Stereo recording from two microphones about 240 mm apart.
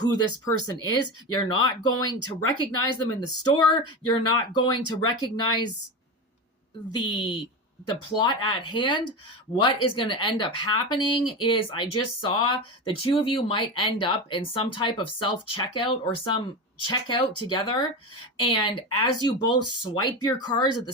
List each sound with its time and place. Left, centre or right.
0.0 s speech: centre
7.0 s speech: left